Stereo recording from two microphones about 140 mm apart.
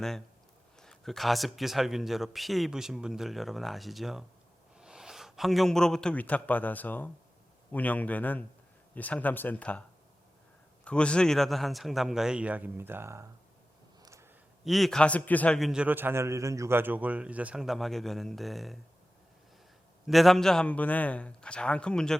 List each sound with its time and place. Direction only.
0.8 s a man's voice: 5° left (ahead or behind)
10.8 s a man's voice: 5° left (ahead or behind); by 13.2 s 20° right (ahead or behind)
14.0 s a sound: 20° right (ahead or behind)
14.6 s a man's voice: centre (ahead or behind)
20.1 s a man's voice: centre (ahead or behind)